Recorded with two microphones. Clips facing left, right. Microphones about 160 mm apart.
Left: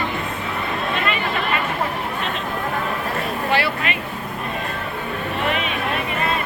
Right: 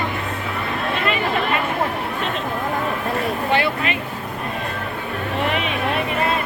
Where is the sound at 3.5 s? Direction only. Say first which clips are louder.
Right 1 dB; 25° right (ahead or behind).